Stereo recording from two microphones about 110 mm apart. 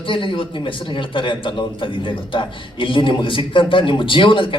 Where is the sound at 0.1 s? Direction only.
50° left (ahead or behind).